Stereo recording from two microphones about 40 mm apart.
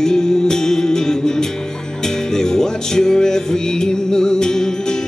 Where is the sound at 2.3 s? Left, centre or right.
Centre.